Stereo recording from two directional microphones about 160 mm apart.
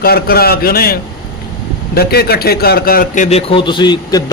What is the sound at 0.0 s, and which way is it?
Speech, 70° left (ahead or behind).